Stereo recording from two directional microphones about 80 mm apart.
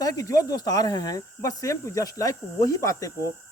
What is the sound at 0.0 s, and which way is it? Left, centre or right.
Speech, left.